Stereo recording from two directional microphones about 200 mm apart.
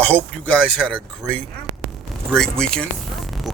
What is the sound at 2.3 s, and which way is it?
Music, 5° left (ahead or behind).